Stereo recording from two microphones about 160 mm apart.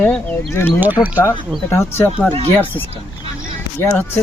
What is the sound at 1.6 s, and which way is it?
Speech, 15° left (ahead or behind).